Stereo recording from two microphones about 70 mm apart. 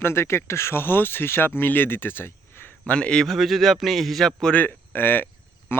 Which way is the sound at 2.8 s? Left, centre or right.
Centre.